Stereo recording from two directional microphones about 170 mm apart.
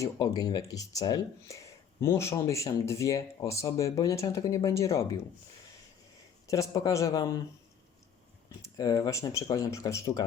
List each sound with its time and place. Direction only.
0.0 s speech: 25° left (ahead or behind)
6.5 s speech: 20° left (ahead or behind)
8.6 s speech: 20° left (ahead or behind)